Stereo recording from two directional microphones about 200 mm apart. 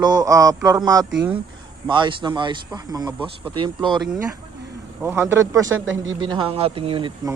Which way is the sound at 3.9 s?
Centre (ahead or behind).